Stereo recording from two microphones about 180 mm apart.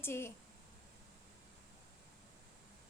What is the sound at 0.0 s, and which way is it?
Speech, 15° left (ahead or behind).